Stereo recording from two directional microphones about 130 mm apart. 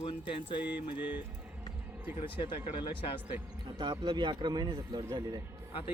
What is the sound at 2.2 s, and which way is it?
Speech, 40° left (ahead or behind).